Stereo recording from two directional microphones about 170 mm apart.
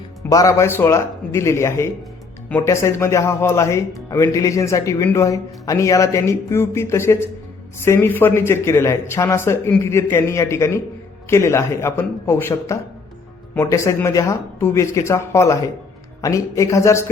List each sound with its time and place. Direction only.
0.3 s speech: 20° left (ahead or behind)